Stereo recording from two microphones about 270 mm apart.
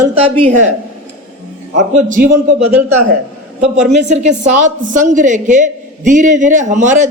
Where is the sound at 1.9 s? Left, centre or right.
Right.